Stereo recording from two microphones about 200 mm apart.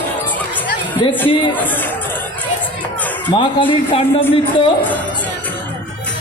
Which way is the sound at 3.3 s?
25° left (ahead or behind).